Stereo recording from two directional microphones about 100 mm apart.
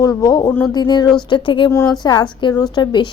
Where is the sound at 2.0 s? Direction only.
45° left (ahead or behind).